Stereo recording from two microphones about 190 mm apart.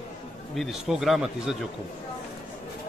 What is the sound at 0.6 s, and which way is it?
Speech, centre (ahead or behind).